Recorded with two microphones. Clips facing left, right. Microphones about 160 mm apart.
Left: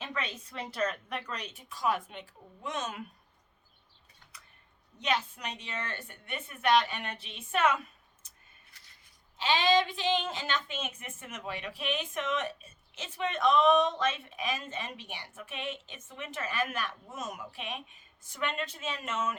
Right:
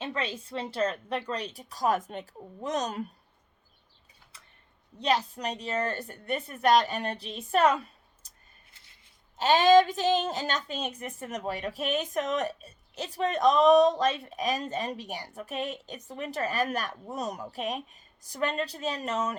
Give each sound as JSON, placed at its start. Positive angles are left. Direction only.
{"t": 0.0, "sound": "a woman's voice", "side_deg": -30}
{"t": 4.9, "sound": "a woman's voice", "side_deg": -35}
{"t": 8.7, "sound": "scissors", "side_deg": -25}
{"t": 9.4, "sound": "a woman's voice", "side_deg": -45}